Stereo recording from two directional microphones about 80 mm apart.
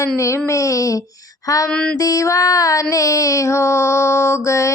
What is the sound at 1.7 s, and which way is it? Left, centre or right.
Music, centre.